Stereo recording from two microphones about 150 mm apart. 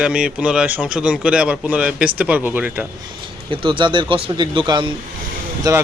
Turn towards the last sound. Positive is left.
turn(degrees=-25)  # may be behind; listen again after turning